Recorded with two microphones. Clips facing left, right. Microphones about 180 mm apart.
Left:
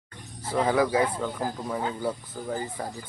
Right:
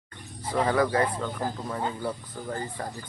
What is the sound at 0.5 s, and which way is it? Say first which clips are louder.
Speech: left 1 dB; 5° left (ahead or behind).